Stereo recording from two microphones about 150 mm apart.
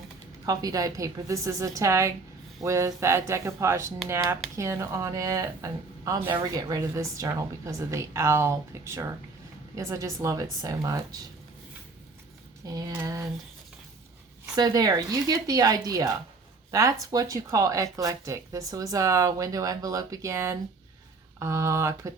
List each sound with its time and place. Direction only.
0.4 s speech: 25° right (ahead or behind)
12.6 s speech: 25° right (ahead or behind)
14.5 s speech: 25° right (ahead or behind)